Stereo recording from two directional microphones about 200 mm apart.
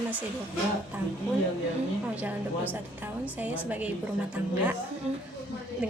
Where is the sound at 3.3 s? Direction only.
10° right (ahead or behind).